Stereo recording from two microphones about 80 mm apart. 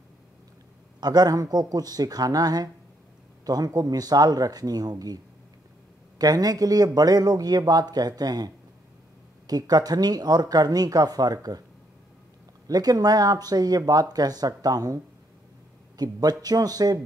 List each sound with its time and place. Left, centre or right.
1.0 s speech: right
9.5 s speech: right
12.6 s speech: right
16.0 s speech: right